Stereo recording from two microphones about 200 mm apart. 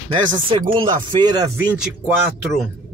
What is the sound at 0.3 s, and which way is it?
Speech, 20° right (ahead or behind).